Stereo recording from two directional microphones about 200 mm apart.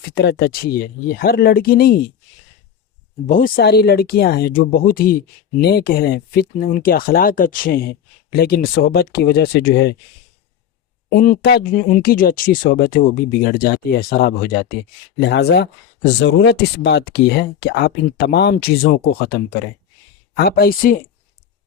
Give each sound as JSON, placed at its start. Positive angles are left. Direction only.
{"t": 0.1, "sound": "speech", "side_deg": 55}
{"t": 3.2, "sound": "speech", "side_deg": 40}
{"t": 11.1, "sound": "speech", "side_deg": 50}